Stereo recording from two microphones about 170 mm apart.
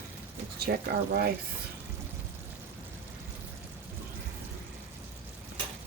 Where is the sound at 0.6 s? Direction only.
65° right (ahead or behind).